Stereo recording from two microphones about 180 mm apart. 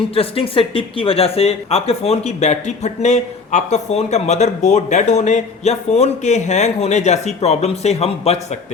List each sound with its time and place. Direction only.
0.1 s speech: 30° left (ahead or behind)